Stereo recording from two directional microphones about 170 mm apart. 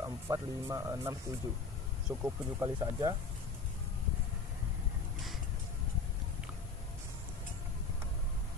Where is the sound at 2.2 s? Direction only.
15° right (ahead or behind).